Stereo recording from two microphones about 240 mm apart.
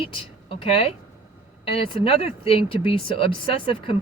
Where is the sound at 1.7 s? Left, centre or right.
Left.